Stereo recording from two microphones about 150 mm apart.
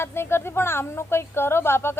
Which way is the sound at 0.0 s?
15° left (ahead or behind).